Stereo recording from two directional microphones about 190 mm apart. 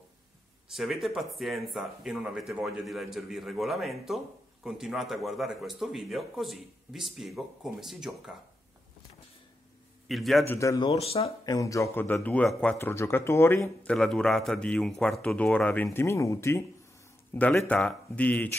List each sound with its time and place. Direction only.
0.7 s speech: centre (ahead or behind)
10.0 s a man's voice: centre (ahead or behind)
10.5 s speech: 15° left (ahead or behind)
10.9 s speech: 30° left (ahead or behind)
11.5 s speech: 15° left (ahead or behind)